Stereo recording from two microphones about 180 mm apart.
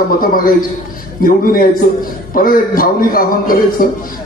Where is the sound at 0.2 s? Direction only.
50° left (ahead or behind).